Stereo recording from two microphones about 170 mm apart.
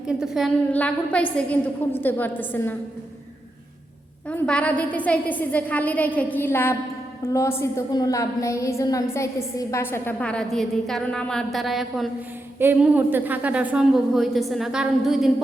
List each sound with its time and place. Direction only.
0.1 s a woman's voice: centre (ahead or behind)
4.3 s a woman's voice: 5° left (ahead or behind)
12.5 s a woman's voice: 10° right (ahead or behind)